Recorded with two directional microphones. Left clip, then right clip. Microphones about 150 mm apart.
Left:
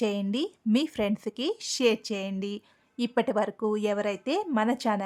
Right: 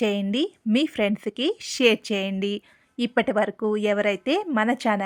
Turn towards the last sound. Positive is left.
turn(degrees=-15)  # may be behind; listen again after turning